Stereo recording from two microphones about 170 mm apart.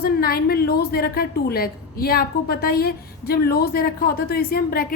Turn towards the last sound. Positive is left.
turn(degrees=60)  # may be behind; listen again after turning